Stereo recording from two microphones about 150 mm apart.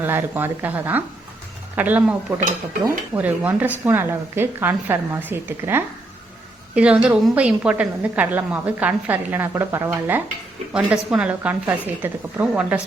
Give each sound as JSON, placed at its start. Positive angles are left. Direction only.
{"t": 0.0, "sound": "a woman's voice", "side_deg": -15}
{"t": 3.2, "sound": "a woman's voice", "side_deg": -10}